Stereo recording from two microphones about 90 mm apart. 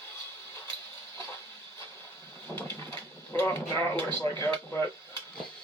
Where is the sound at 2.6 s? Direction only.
25° left (ahead or behind).